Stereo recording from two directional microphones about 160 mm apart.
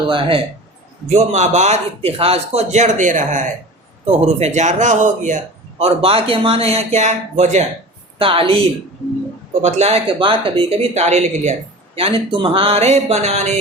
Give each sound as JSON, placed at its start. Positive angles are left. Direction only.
{"t": 0.1, "sound": "speech", "side_deg": -35}
{"t": 1.0, "sound": "a man's voice", "side_deg": -45}
{"t": 5.8, "sound": "speech", "side_deg": -35}
{"t": 8.2, "sound": "speech", "side_deg": -35}
{"t": 9.6, "sound": "speech", "side_deg": -40}